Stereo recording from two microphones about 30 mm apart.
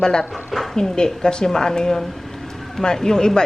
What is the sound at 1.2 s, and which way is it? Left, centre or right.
Speech, left.